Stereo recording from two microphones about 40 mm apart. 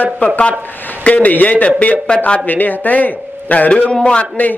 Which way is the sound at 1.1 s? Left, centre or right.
Left.